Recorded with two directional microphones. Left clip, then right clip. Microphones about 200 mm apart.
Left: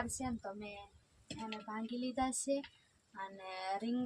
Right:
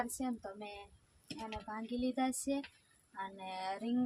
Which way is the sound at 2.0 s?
5° left (ahead or behind).